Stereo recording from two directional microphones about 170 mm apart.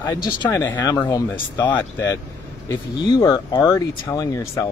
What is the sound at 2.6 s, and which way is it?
Speech, 25° left (ahead or behind).